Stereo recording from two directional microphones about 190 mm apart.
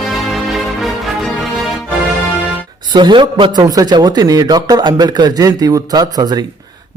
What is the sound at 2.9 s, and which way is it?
A man's voice, 25° right (ahead or behind).